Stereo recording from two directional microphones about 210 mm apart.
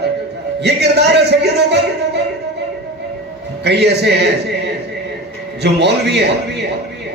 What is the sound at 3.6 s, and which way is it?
Speech, 55° right (ahead or behind).